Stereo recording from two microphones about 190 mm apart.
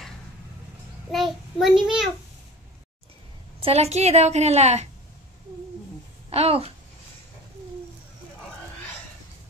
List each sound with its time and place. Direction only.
1.1 s a child's voice: centre (ahead or behind)
3.6 s a woman's voice: 35° right (ahead or behind)
6.3 s a woman's voice: 30° right (ahead or behind)